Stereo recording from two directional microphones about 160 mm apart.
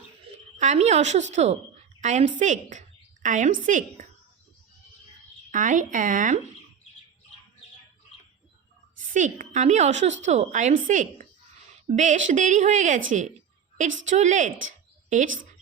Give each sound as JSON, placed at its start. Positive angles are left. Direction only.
{"t": 0.6, "sound": "a woman's voice", "side_deg": -45}
{"t": 5.5, "sound": "a woman's voice", "side_deg": -55}
{"t": 9.0, "sound": "a woman's voice", "side_deg": -55}